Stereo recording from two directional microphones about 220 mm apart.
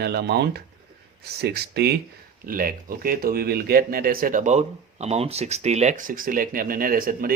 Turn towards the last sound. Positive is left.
turn(degrees=-40)  # may be behind; listen again after turning